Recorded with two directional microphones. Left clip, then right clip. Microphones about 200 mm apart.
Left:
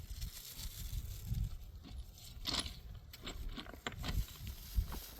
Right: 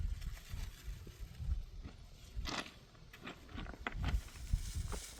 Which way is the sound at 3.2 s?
30° left (ahead or behind).